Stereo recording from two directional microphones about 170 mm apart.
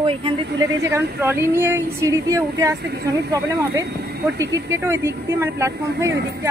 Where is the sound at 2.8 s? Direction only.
70° right (ahead or behind).